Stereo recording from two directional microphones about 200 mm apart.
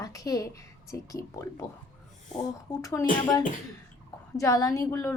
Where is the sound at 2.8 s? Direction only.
15° left (ahead or behind).